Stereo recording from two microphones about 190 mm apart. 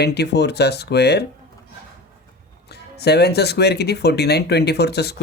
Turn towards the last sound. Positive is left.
turn(degrees=60)  # may be behind; listen again after turning